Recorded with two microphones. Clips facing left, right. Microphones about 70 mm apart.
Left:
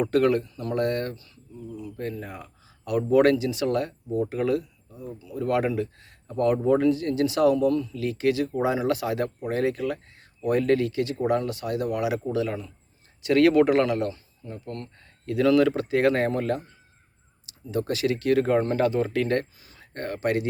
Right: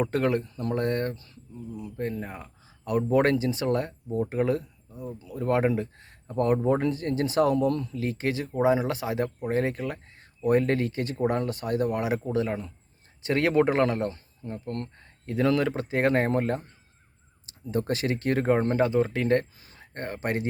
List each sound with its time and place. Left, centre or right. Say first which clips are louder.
0.0 s speech: left 4 dB; right
7.9 s speech: left 4 dB; right
14.9 s speech: left 5 dB; right
19.5 s a sound: even; right
19.8 s speech: left 4 dB; right